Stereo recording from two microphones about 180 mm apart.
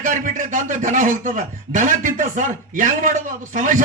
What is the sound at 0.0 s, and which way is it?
A man's voice, 45° right (ahead or behind).